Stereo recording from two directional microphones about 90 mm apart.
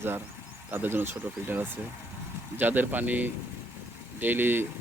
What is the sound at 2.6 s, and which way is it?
Speech, 20° right (ahead or behind).